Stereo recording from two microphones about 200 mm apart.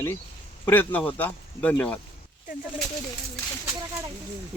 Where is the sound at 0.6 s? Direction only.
10° left (ahead or behind).